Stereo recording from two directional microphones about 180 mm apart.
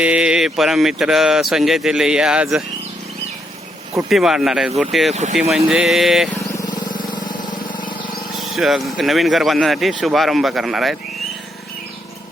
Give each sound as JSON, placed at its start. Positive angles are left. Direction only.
{"t": 0.0, "sound": "speech", "side_deg": -5}
{"t": 4.1, "sound": "speech", "side_deg": 0}
{"t": 6.5, "sound": "vehicle", "side_deg": 20}
{"t": 8.4, "sound": "speech", "side_deg": 0}